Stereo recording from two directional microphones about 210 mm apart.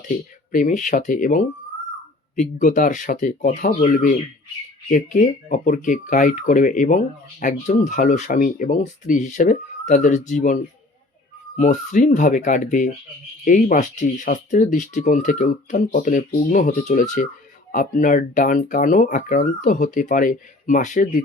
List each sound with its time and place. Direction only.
0.5 s speech: 40° left (ahead or behind)